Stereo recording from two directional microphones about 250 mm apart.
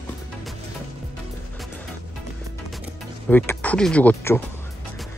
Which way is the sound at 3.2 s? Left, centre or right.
Centre.